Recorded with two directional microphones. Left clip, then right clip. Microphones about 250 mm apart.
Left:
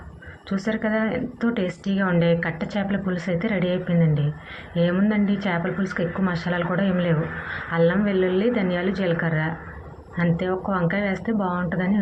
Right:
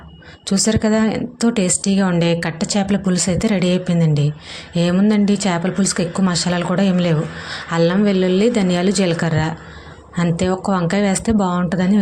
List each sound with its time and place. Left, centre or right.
0.4 s a woman's voice: right